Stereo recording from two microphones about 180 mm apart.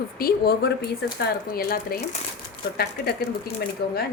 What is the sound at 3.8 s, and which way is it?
Speech, 55° left (ahead or behind).